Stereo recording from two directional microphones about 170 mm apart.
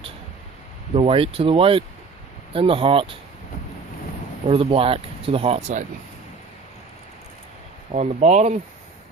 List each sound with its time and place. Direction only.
0.9 s speech: 35° right (ahead or behind)
4.4 s speech: 35° right (ahead or behind)
7.9 s speech: 45° right (ahead or behind)